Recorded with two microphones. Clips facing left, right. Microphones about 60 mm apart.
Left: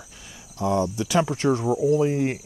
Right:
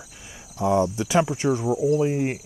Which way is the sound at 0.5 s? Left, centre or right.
Centre.